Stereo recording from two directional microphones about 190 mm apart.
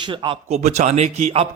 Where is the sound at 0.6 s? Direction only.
35° right (ahead or behind).